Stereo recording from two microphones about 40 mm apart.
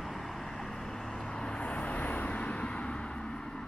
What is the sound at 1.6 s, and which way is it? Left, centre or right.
Vehicle, left.